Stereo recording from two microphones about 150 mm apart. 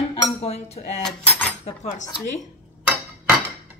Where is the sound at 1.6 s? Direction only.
50° left (ahead or behind).